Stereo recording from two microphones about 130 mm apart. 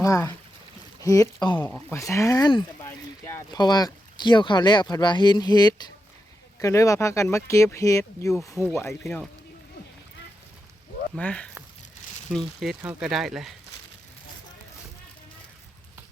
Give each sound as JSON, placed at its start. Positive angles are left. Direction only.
{"t": 0.0, "sound": "speech", "side_deg": 25}
{"t": 1.5, "sound": "speech", "side_deg": 15}
{"t": 2.8, "sound": "a sound", "side_deg": 20}
{"t": 3.5, "sound": "speech", "side_deg": 30}
{"t": 9.0, "sound": "speech", "side_deg": 5}
{"t": 11.2, "sound": "speech", "side_deg": 10}